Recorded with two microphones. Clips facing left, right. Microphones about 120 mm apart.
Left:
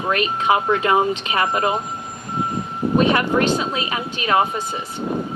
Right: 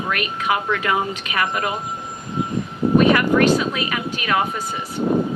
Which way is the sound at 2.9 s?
25° left (ahead or behind).